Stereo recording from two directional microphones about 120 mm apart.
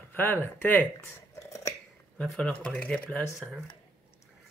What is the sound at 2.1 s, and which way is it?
Speech, 5° left (ahead or behind).